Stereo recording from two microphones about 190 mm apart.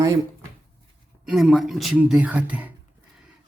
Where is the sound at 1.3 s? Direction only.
Centre (ahead or behind).